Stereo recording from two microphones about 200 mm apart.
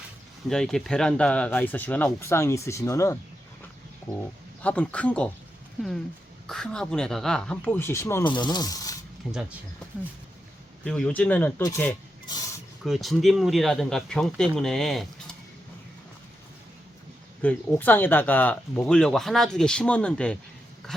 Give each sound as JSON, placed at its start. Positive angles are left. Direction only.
{"t": 0.4, "sound": "speech", "side_deg": 5}
{"t": 4.6, "sound": "speech", "side_deg": 5}
{"t": 6.5, "sound": "speech", "side_deg": 5}
{"t": 9.2, "sound": "speech", "side_deg": 0}
{"t": 10.8, "sound": "speech", "side_deg": 5}
{"t": 12.2, "sound": "a sound", "side_deg": 20}
{"t": 12.8, "sound": "speech", "side_deg": 0}
{"t": 17.4, "sound": "speech", "side_deg": 10}